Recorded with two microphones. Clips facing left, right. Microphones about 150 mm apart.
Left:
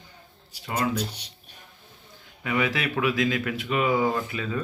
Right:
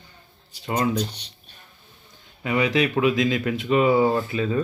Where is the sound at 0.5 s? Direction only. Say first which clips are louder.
Right 4 dB; 10° left (ahead or behind).